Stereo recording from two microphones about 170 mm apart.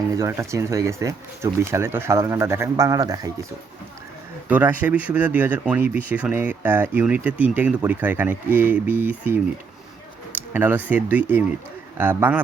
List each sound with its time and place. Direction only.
0.1 s speech: 15° right (ahead or behind)
4.4 s speech: 10° right (ahead or behind)